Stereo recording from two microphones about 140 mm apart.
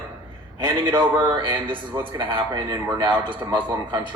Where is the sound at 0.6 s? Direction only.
30° right (ahead or behind).